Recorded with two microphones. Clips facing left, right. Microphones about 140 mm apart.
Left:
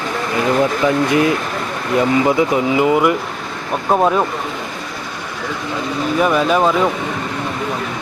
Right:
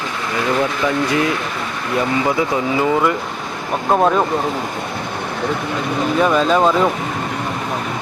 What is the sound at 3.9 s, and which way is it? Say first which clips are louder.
Speech: even; centre (ahead or behind).